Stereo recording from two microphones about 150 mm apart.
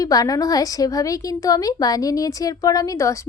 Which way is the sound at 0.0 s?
25° left (ahead or behind).